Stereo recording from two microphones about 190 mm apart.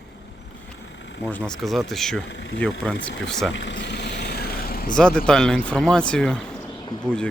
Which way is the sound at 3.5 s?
70° left (ahead or behind).